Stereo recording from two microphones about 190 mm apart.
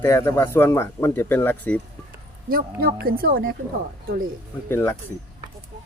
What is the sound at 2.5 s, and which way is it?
Speech, 50° right (ahead or behind).